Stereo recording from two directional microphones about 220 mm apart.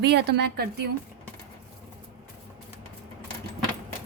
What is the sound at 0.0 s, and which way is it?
Speech, 50° right (ahead or behind).